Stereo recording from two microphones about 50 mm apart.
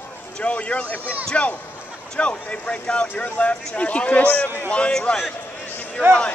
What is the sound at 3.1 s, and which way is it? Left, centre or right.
Speech, left.